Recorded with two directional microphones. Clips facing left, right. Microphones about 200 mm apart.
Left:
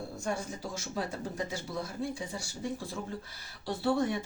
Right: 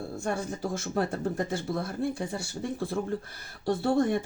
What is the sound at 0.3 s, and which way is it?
Speech, 55° right (ahead or behind).